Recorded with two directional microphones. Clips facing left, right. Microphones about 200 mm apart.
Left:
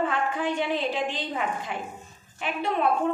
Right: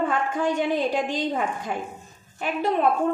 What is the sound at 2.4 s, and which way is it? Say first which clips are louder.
Speech: right 4 dB; 45° right (ahead or behind).